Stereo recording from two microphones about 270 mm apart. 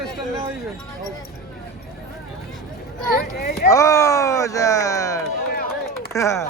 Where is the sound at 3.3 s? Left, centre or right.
Left.